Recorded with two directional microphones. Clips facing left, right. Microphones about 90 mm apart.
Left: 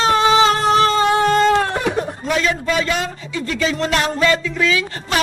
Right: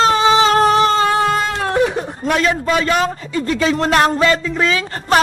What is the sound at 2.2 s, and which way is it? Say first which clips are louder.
A man's voice: right 5 dB; 45° right (ahead or behind).